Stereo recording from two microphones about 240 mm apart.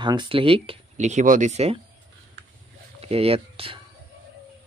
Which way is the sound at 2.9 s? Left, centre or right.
Right.